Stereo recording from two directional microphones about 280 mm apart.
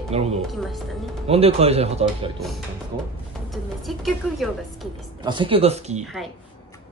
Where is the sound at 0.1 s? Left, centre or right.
Right.